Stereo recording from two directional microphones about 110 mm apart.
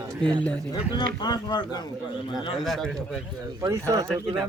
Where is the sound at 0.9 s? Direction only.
40° left (ahead or behind).